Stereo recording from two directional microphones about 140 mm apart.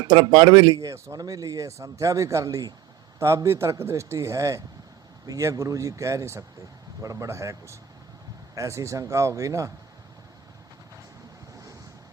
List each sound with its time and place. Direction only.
0.1 s speech: 35° right (ahead or behind)